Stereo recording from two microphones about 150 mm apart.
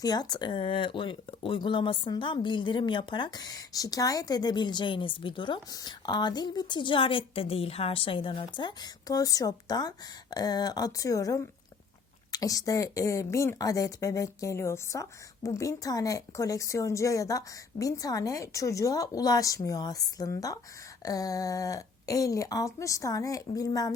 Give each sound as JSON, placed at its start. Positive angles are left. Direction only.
{"t": 0.0, "sound": "speech", "side_deg": 25}